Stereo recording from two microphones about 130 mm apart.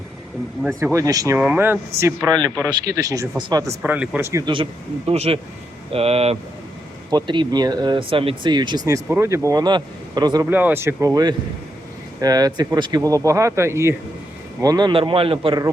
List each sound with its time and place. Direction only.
0.9 s speech: 25° right (ahead or behind)
1.4 s speech: 15° right (ahead or behind)
3.8 s speech: 10° right (ahead or behind)
4.4 s speech: 40° right (ahead or behind)
7.1 s speech: 35° right (ahead or behind)
8.9 s speech: 20° right (ahead or behind); by 10.4 s 35° right (ahead or behind)
10.4 s speech: 15° right (ahead or behind); by 15.5 s 45° right (ahead or behind)